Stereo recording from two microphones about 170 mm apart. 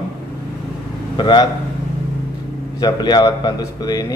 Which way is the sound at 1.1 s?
25° left (ahead or behind).